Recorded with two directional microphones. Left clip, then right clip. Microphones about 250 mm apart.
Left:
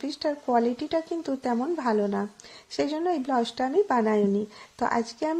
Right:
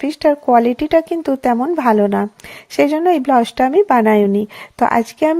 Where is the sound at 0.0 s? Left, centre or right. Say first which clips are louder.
Right 14 dB; right.